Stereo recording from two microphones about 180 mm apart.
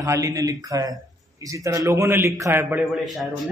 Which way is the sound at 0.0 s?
15° right (ahead or behind).